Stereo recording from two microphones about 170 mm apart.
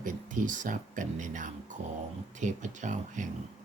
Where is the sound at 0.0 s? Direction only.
50° right (ahead or behind).